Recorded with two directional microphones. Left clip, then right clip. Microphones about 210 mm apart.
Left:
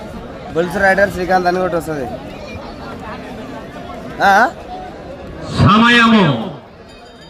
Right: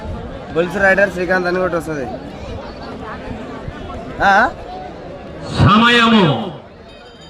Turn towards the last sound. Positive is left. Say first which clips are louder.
# left 1 dB
turn(degrees=-40)  # may be behind; listen again after turning